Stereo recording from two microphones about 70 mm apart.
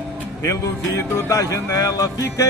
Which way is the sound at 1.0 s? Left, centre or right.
Left.